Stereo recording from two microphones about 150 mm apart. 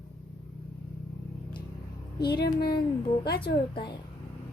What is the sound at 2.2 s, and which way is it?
Speech, 90° left.